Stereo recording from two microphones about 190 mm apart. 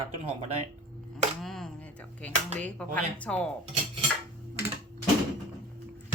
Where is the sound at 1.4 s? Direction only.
Centre (ahead or behind).